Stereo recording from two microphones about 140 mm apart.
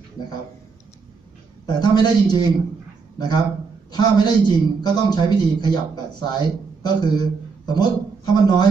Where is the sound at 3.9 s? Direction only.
30° left (ahead or behind).